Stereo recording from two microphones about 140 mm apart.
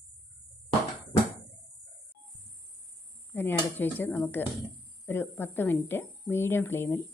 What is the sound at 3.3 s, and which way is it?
Speech, 15° left (ahead or behind).